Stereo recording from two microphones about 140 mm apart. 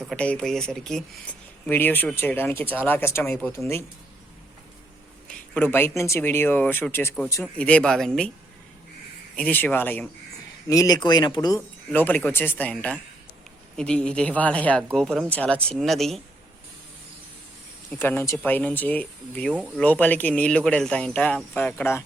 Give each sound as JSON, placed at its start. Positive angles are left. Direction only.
{"t": 0.2, "sound": "speech", "side_deg": 5}
{"t": 5.3, "sound": "speech", "side_deg": 10}
{"t": 7.5, "sound": "speech", "side_deg": 10}
{"t": 9.3, "sound": "speech", "side_deg": 10}
{"t": 10.7, "sound": "speech", "side_deg": 25}
{"t": 11.9, "sound": "speech", "side_deg": 10}
{"t": 17.9, "sound": "speech", "side_deg": 15}